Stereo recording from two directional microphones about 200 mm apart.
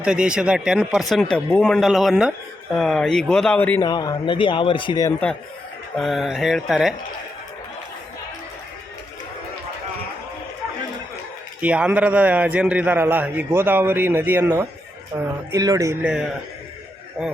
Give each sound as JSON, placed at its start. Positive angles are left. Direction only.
{"t": 0.0, "sound": "speech", "side_deg": -5}
{"t": 3.8, "sound": "a man's voice", "side_deg": 20}
{"t": 6.0, "sound": "speech", "side_deg": 0}
{"t": 11.6, "sound": "a man's voice", "side_deg": -5}